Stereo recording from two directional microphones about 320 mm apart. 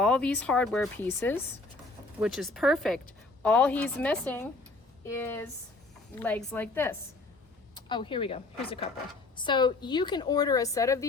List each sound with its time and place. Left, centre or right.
0.0 s a woman's voice: centre